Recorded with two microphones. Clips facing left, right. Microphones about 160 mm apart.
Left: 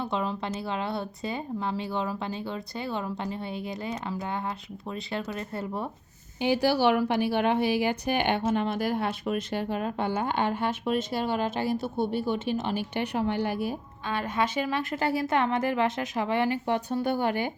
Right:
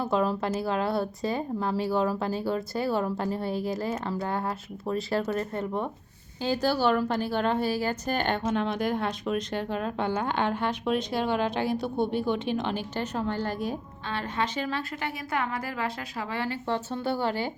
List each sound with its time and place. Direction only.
0.0 s a woman's voice: 5° right (ahead or behind)
3.8 s a woman's voice: 15° left (ahead or behind)
4.3 s a woman's voice: centre (ahead or behind)
6.4 s a woman's voice: 15° left (ahead or behind)
14.9 s a woman's voice: 30° left (ahead or behind); by 17.5 s 15° left (ahead or behind)